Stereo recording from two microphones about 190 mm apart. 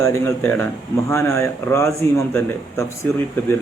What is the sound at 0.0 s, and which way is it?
A man's voice, 10° left (ahead or behind).